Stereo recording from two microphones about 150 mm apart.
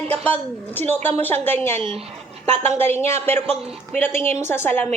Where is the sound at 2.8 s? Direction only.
15° left (ahead or behind).